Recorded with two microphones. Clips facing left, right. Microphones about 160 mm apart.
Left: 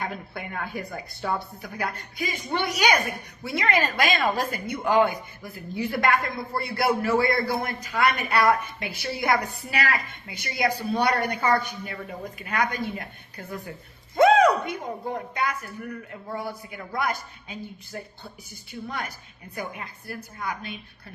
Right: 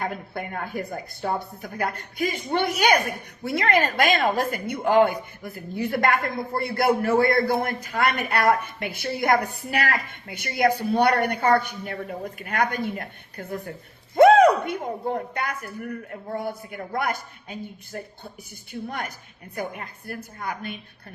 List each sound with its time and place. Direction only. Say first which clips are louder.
0.0 s a woman's voice: right 3 dB; 50° right (ahead or behind)